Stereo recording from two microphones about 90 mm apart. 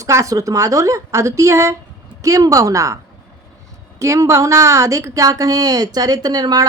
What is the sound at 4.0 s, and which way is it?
Speech, 35° right (ahead or behind).